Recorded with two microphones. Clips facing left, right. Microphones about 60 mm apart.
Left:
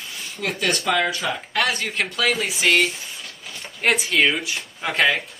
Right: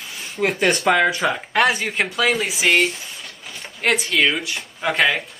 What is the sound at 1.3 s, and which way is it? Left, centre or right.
Speech, centre.